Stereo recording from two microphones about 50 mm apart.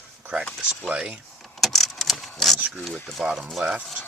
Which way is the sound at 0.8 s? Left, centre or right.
Right.